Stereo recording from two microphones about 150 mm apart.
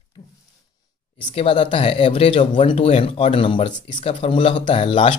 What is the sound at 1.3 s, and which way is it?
Speech, 35° left (ahead or behind).